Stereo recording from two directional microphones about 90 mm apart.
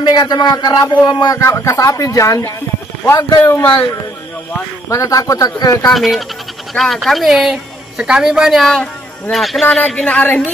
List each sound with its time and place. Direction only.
0.0 s speech: 55° left (ahead or behind)
1.4 s speech: 30° left (ahead or behind)
3.2 s speech: 55° left (ahead or behind)
4.8 s speech: 35° left (ahead or behind)
5.9 s a woman's voice: centre (ahead or behind)